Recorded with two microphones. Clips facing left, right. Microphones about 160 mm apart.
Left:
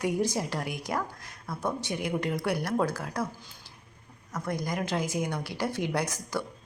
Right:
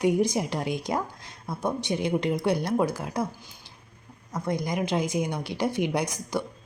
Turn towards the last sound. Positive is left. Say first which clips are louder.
# right 3 dB
turn(degrees=-20)  # may be behind; listen again after turning